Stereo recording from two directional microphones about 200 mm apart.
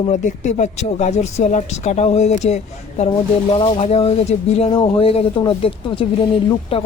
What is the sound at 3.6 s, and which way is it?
Speech, 30° left (ahead or behind).